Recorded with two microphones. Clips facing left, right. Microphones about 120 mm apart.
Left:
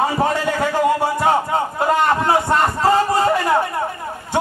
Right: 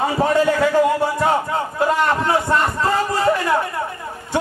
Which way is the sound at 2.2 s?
35° left (ahead or behind).